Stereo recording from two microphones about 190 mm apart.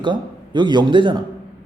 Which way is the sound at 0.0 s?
25° right (ahead or behind).